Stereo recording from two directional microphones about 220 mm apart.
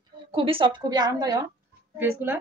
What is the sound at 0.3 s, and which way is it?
A woman's voice, 25° right (ahead or behind).